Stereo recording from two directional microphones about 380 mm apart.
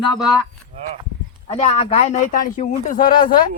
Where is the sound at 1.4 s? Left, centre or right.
Centre.